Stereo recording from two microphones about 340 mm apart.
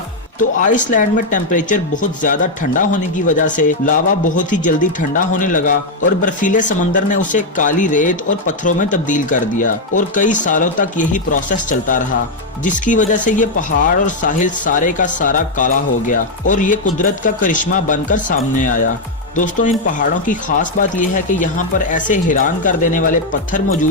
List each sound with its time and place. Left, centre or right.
0.3 s speech: left